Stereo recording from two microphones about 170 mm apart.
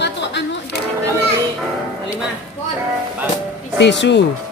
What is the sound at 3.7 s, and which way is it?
Speech, 90° left.